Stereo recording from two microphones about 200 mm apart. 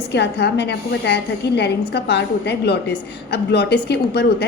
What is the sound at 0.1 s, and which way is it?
A woman's voice, 55° left (ahead or behind).